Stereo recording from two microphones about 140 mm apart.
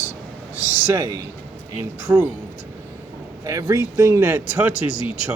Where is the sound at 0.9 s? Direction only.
20° right (ahead or behind).